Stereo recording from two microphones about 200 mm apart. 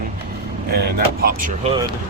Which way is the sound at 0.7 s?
50° right (ahead or behind).